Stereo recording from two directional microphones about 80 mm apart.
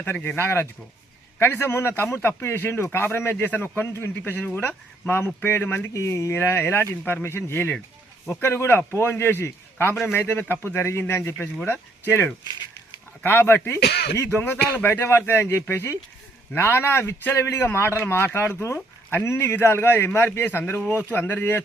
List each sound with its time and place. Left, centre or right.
0.0 s speech: left
5.9 s speech: left
17.3 s speech: left